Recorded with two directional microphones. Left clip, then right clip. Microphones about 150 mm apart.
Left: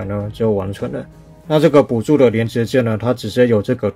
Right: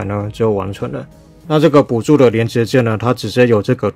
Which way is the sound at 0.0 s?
35° right (ahead or behind).